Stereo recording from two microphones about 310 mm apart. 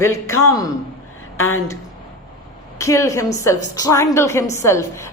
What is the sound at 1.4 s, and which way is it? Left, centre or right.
Speech, left.